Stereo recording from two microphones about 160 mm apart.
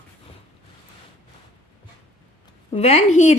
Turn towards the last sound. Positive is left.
turn(degrees=45)  # may be behind; listen again after turning